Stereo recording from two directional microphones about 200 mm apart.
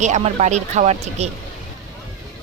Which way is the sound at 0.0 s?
35° right (ahead or behind).